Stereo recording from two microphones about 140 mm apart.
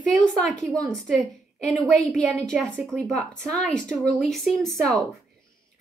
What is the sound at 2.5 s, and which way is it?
A woman's voice, centre (ahead or behind).